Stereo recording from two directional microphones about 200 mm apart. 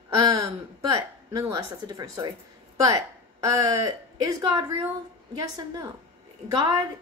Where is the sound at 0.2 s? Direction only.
15° right (ahead or behind).